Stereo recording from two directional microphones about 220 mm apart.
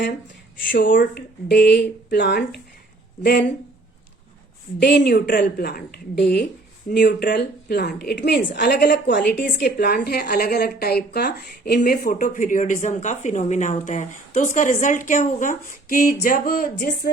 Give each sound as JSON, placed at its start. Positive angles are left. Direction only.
{"t": 0.7, "sound": "a woman's voice", "side_deg": 45}
{"t": 4.8, "sound": "a woman's voice", "side_deg": 50}